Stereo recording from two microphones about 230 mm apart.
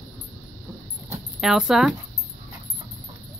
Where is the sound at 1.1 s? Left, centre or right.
Centre.